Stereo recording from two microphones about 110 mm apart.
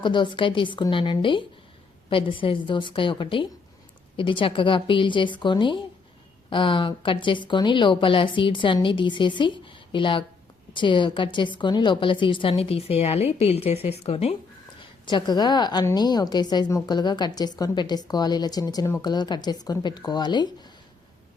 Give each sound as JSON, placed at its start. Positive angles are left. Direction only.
{"t": 0.0, "sound": "speech", "side_deg": 45}
{"t": 14.8, "sound": "a woman's voice", "side_deg": 45}